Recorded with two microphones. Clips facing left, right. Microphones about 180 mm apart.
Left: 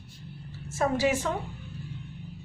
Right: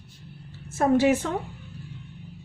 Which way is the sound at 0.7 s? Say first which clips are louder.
Right 5 dB; 55° right (ahead or behind).